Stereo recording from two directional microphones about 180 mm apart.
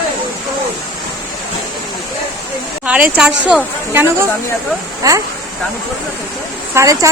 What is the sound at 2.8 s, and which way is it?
A woman's voice, 5° right (ahead or behind).